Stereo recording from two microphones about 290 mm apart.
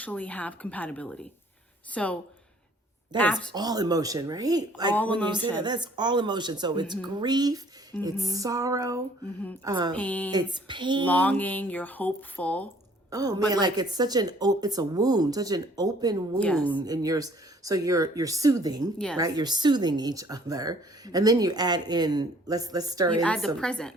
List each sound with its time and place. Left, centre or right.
0.0 s speech: centre
3.5 s speech: centre
9.9 s speech: centre
10.3 s speech: centre
11.0 s speech: centre
13.1 s a woman's voice: centre
16.4 s speech: centre
16.6 s speech: centre
23.2 s speech: centre